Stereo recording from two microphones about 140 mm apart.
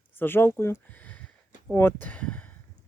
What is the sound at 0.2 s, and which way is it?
Speech, 15° left (ahead or behind).